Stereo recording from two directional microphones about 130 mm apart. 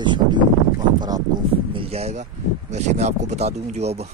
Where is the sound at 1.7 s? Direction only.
45° right (ahead or behind).